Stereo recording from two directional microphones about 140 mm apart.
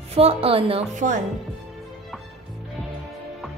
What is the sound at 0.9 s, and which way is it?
Speech, 65° right (ahead or behind).